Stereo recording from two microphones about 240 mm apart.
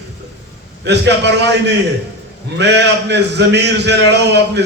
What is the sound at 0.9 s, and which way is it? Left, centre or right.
A man's voice, right.